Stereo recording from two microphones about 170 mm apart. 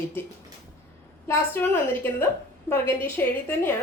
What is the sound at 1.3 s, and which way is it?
A woman's voice, 15° left (ahead or behind).